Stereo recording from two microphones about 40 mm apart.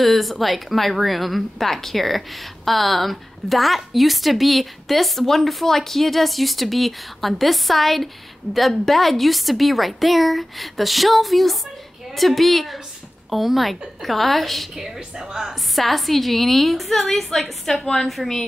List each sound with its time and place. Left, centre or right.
0.0 s a woman's voice: centre
15.0 s a woman's voice: centre
15.7 s a woman's voice: centre